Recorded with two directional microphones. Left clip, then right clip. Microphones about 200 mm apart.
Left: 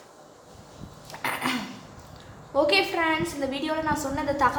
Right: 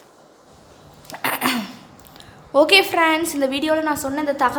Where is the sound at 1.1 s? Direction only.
50° right (ahead or behind).